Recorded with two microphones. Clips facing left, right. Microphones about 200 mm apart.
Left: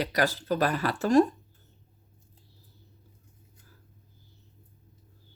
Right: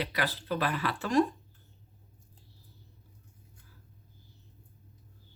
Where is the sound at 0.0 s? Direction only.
45° left (ahead or behind).